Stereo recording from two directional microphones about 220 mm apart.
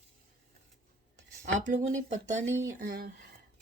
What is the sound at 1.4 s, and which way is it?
Speech, 35° right (ahead or behind).